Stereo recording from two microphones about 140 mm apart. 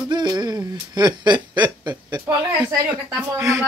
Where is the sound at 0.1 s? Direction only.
30° right (ahead or behind).